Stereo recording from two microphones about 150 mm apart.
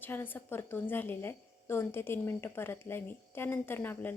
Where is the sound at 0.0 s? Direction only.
15° left (ahead or behind).